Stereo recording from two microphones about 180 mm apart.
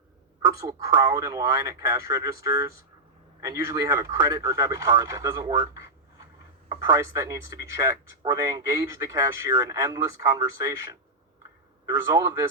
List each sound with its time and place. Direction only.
0.4 s speech: 20° right (ahead or behind)